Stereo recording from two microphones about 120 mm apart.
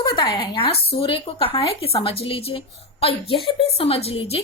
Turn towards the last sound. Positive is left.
turn(degrees=55)  # may be behind; listen again after turning